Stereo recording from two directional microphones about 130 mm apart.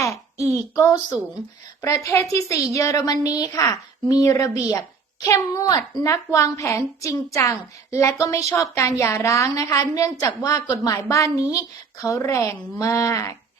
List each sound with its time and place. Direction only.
0.0 s child singing: 25° left (ahead or behind)
0.8 s a woman's voice: 30° left (ahead or behind)